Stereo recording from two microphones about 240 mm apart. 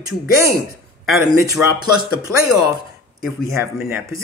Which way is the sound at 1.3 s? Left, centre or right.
Centre.